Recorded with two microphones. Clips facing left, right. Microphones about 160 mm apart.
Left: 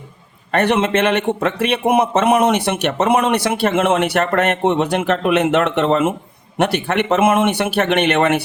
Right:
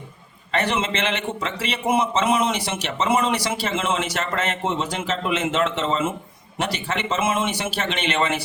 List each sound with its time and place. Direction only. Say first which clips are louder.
0.5 s a man's voice: left 8 dB; 60° left (ahead or behind)